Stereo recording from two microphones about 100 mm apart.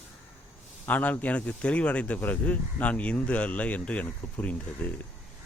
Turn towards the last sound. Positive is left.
turn(degrees=15)  # may be behind; listen again after turning